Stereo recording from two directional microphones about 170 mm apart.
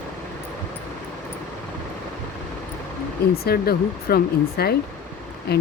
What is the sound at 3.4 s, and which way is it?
Speech, 65° left (ahead or behind).